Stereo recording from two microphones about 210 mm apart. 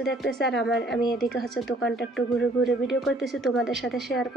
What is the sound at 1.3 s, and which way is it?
A woman's voice, centre (ahead or behind).